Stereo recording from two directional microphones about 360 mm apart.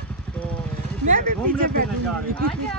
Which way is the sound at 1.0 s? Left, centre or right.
Right.